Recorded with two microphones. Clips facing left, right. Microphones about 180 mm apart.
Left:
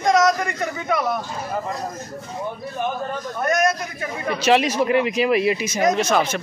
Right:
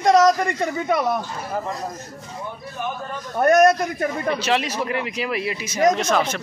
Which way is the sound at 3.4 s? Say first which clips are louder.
Right 6 dB; 60° right (ahead or behind).